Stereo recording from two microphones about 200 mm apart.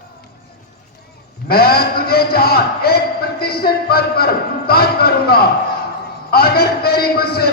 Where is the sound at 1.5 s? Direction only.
50° left (ahead or behind).